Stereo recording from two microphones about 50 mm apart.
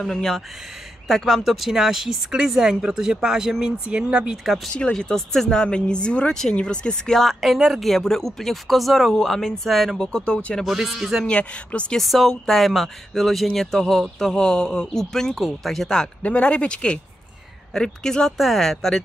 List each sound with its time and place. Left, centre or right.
0.0 s speech: centre
4.7 s speech: centre
5.0 s speech: centre
7.2 s speech: centre
9.9 s speech: centre
10.6 s speech: centre
11.2 s speech: left
12.0 s speech: centre
16.2 s speech: left
16.4 s speech: left
18.4 s speech: centre